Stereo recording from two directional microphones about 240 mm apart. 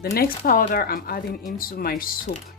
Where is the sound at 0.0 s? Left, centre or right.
Left.